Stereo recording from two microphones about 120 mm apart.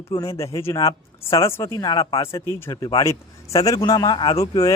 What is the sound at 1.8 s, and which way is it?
Speech, 35° left (ahead or behind).